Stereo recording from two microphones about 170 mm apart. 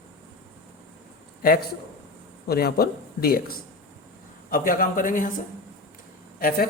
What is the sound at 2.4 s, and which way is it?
A man's voice, 65° left (ahead or behind).